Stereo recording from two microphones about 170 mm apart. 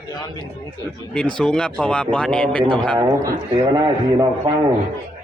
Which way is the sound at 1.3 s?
5° left (ahead or behind).